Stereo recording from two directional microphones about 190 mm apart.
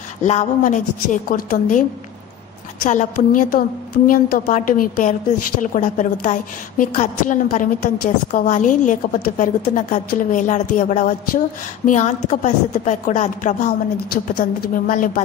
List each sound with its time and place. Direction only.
0.2 s a woman's voice: 35° left (ahead or behind)
14.1 s a woman's voice: 50° left (ahead or behind)